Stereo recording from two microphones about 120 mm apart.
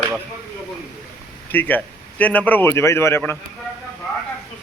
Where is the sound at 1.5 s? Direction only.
15° left (ahead or behind).